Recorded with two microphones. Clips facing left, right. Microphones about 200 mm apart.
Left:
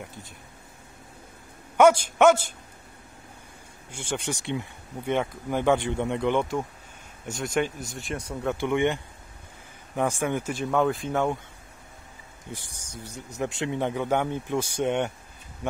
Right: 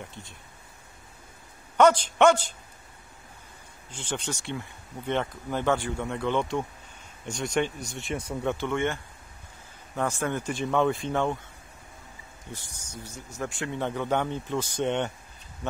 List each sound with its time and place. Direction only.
1.8 s speech: 10° left (ahead or behind)
3.9 s speech: 10° left (ahead or behind)
7.3 s speech: centre (ahead or behind)
8.3 s speech: 10° left (ahead or behind)
12.4 s speech: 15° left (ahead or behind)